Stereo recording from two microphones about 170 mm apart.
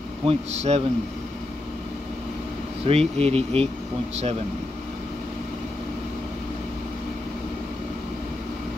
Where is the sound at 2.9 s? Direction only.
35° right (ahead or behind).